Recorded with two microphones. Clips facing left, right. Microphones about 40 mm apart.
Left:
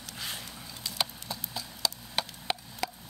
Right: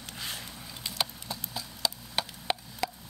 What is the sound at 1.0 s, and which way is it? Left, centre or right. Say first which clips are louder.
Clip-clop: even; centre.